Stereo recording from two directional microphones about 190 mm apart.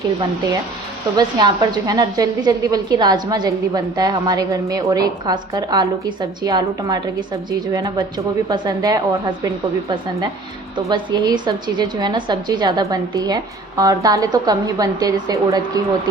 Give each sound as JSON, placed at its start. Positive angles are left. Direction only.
{"t": 1.1, "sound": "a woman's voice", "side_deg": -20}
{"t": 10.8, "sound": "a woman's voice", "side_deg": -25}